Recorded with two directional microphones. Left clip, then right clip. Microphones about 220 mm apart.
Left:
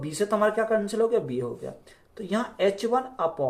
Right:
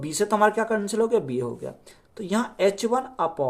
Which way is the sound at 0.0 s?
45° right (ahead or behind).